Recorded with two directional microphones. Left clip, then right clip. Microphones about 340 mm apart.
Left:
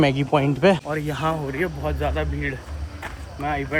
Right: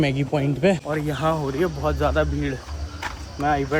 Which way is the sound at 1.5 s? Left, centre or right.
Centre.